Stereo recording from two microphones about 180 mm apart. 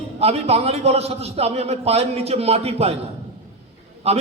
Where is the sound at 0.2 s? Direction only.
35° right (ahead or behind).